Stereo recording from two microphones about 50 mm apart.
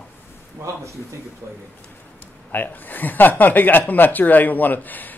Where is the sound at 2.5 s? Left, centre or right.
Left.